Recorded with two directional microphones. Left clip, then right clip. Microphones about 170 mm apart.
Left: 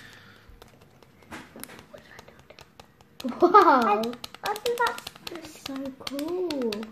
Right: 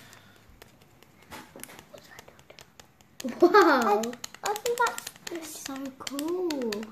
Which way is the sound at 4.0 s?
45° right (ahead or behind).